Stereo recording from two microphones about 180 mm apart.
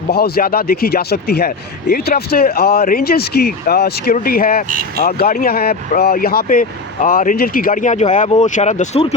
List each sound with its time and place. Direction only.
0.1 s speech: 60° left (ahead or behind); by 9.1 s 35° left (ahead or behind)